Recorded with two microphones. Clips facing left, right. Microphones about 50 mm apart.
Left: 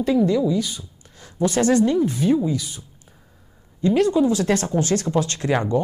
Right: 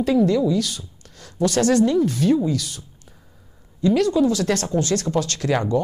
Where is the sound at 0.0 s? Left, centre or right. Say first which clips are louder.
Right 1 dB; centre.